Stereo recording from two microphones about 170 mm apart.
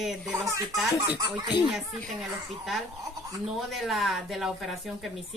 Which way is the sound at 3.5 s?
Centre (ahead or behind).